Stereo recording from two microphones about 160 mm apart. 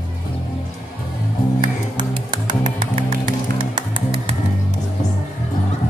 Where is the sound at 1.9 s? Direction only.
30° right (ahead or behind).